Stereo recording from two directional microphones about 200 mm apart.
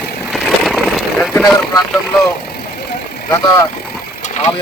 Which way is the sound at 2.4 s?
50° left (ahead or behind).